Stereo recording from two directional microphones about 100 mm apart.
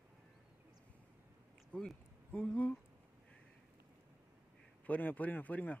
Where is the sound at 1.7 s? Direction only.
10° left (ahead or behind).